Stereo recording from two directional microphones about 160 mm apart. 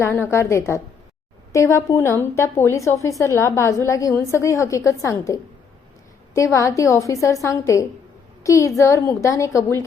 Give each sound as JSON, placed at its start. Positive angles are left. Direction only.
{"t": 0.0, "sound": "a woman's voice", "side_deg": 15}